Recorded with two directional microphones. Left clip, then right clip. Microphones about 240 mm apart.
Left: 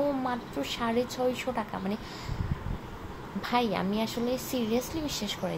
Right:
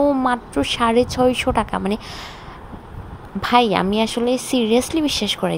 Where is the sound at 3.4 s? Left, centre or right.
Right.